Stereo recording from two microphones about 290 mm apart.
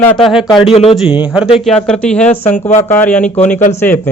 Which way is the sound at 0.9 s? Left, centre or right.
Centre.